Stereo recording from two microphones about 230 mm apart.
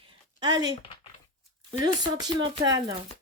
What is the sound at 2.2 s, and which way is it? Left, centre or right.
Speech, centre.